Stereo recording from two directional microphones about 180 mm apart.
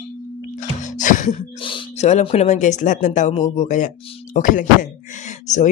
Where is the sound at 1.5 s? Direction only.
30° left (ahead or behind).